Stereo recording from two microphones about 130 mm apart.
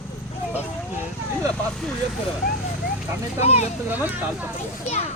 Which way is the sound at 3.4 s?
55° left (ahead or behind).